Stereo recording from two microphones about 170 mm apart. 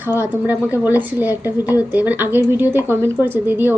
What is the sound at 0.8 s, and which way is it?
A woman's voice, 10° right (ahead or behind).